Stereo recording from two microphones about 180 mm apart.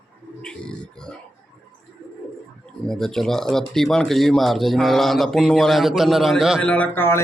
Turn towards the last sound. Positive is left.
turn(degrees=10)  # may be behind; listen again after turning